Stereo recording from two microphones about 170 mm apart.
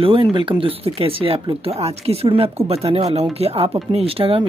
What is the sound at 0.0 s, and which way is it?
Speech, 30° right (ahead or behind).